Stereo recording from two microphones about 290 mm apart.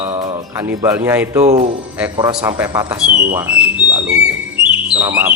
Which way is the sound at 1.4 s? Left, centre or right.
Right.